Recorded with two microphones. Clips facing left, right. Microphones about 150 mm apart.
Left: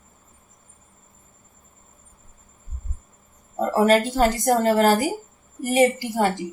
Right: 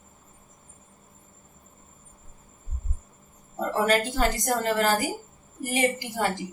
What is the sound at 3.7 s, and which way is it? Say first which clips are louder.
A woman's voice: left 6 dB; 40° left (ahead or behind).